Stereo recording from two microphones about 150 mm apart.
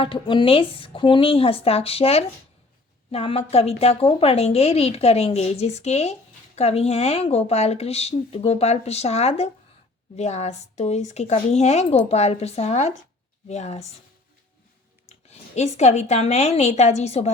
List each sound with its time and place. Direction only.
0.0 s a woman's voice: 35° left (ahead or behind)
15.1 s speech: 45° left (ahead or behind)